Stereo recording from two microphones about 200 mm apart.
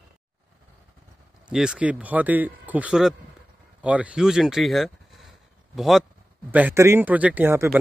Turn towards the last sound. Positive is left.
turn(degrees=-10)  # may be behind; listen again after turning